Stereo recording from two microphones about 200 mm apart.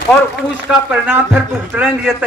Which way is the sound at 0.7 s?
Centre (ahead or behind).